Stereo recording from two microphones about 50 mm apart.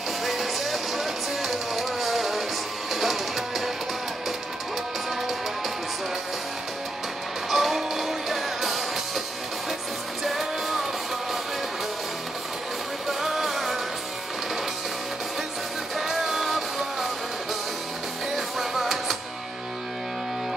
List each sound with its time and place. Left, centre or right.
0.2 s music: centre
7.5 s music: centre
10.2 s music: centre
13.2 s music: centre
16.0 s music: centre
18.3 s music: centre